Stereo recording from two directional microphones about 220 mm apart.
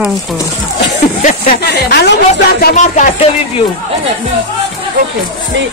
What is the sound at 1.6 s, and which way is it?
Speech, 50° left (ahead or behind).